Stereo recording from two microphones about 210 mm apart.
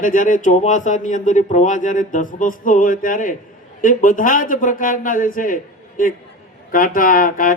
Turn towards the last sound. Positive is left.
turn(degrees=40)  # may be behind; listen again after turning